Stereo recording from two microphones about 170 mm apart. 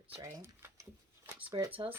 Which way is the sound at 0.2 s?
20° right (ahead or behind).